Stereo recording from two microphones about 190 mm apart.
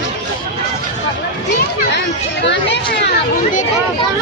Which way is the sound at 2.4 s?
65° left (ahead or behind).